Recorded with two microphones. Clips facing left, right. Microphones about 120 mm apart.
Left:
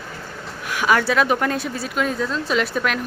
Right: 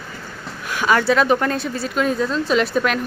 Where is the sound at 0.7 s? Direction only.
5° left (ahead or behind).